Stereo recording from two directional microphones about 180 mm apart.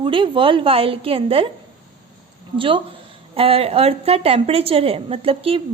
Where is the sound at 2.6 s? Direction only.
30° right (ahead or behind).